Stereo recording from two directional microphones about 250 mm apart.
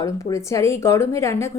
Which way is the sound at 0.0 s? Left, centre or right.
Centre.